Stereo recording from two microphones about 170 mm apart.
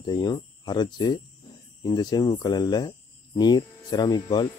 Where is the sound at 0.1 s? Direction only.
25° left (ahead or behind).